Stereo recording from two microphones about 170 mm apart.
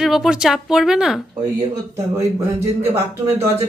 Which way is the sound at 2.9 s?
15° right (ahead or behind).